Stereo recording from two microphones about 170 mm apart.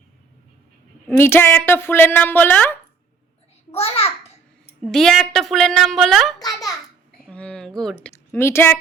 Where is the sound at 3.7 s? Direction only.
35° left (ahead or behind).